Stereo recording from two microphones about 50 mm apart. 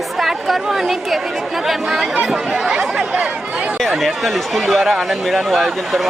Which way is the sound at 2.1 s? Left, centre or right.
Centre.